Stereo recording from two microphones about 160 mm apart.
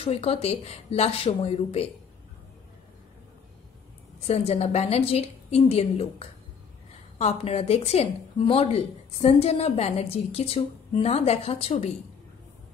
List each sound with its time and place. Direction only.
0.0 s a woman's voice: 40° left (ahead or behind)
4.3 s a woman's voice: 40° left (ahead or behind)